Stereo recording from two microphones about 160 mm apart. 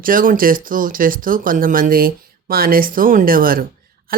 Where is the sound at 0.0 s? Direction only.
60° right (ahead or behind).